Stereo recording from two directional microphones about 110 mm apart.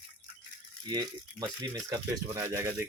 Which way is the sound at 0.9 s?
40° right (ahead or behind).